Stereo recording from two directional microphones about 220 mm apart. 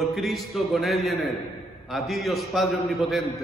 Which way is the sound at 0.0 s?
Centre (ahead or behind).